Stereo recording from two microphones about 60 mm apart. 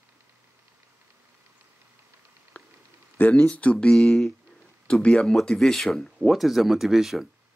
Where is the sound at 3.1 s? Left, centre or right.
Left; by 7.2 s centre.